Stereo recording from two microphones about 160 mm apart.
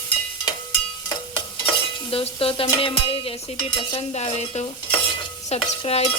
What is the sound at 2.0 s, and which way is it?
A woman's voice, 35° left (ahead or behind).